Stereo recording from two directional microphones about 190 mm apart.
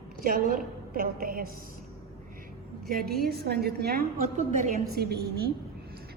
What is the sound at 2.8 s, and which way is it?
A woman's voice, 55° right (ahead or behind).